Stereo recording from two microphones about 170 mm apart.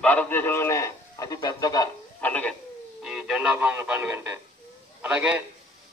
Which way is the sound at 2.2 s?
10° left (ahead or behind).